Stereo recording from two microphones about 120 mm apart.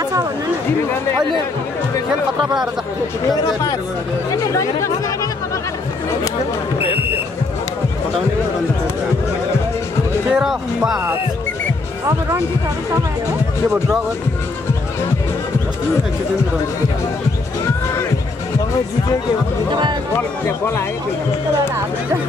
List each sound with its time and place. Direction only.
4.3 s speech: 25° left (ahead or behind)
10.3 s speech: 5° right (ahead or behind)
19.7 s speech: 40° right (ahead or behind)